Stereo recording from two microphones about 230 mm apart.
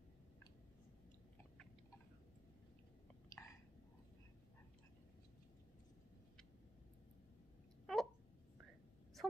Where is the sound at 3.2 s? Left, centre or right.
Centre.